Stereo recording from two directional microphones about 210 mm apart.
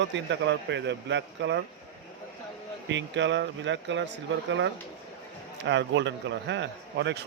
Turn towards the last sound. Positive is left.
turn(degrees=-55)  # may be behind; listen again after turning